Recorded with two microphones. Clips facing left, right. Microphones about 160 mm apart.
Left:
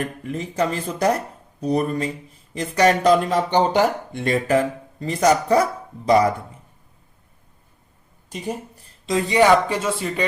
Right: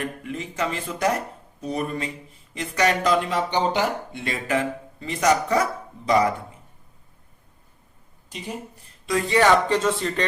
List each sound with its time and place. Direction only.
0.3 s speech: 40° left (ahead or behind)
8.3 s a woman's voice: 45° left (ahead or behind)
9.0 s speech: 20° left (ahead or behind)